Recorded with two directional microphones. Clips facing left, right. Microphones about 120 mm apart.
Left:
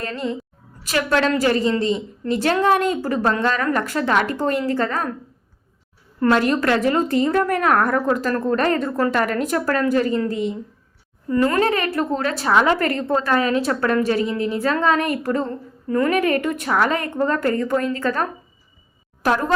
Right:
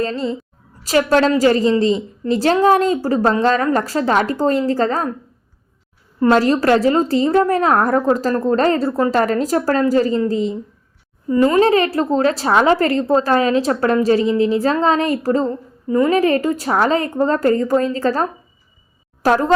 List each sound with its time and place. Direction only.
0.0 s a woman's voice: 25° right (ahead or behind)
6.3 s a woman's voice: 35° right (ahead or behind)
11.3 s a child's voice: 20° right (ahead or behind)
11.6 s a woman's voice: 35° right (ahead or behind)
15.4 s a woman's voice: 20° right (ahead or behind)
16.1 s a woman's voice: 30° right (ahead or behind)
19.2 s a woman's voice: 35° right (ahead or behind)